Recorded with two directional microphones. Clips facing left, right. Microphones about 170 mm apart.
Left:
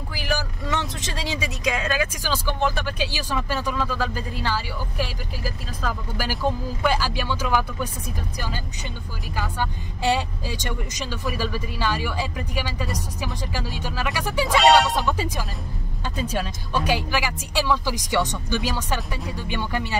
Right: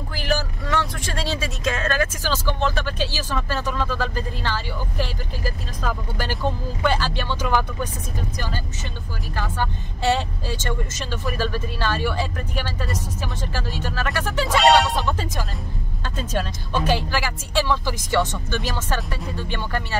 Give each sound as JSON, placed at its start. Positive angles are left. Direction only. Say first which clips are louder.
{"t": 0.1, "sound": "speech", "louder": "right 3 dB", "side_deg": 10}
{"t": 7.4, "sound": "music", "louder": "right 2 dB", "side_deg": 5}
{"t": 9.3, "sound": "speech", "louder": "right 1 dB", "side_deg": 10}
{"t": 14.5, "sound": "music", "louder": "even", "side_deg": 0}
{"t": 15.1, "sound": "speech", "louder": "left 1 dB", "side_deg": 10}